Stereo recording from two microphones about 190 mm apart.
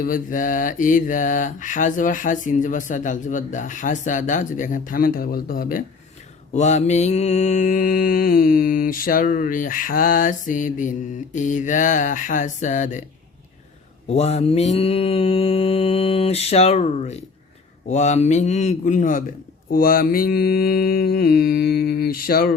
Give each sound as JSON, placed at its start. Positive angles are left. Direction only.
{"t": 0.0, "sound": "mantra", "side_deg": 45}
{"t": 6.5, "sound": "mantra", "side_deg": 40}
{"t": 14.1, "sound": "mantra", "side_deg": 35}